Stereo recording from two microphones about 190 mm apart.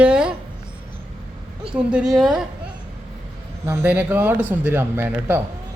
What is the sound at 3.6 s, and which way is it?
Speech, 10° right (ahead or behind).